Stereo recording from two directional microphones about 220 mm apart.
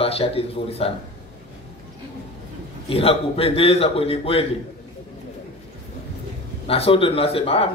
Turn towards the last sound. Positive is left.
turn(degrees=25)  # may be behind; listen again after turning